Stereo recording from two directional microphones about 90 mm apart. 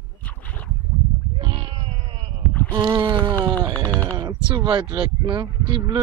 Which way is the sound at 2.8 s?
60° right (ahead or behind).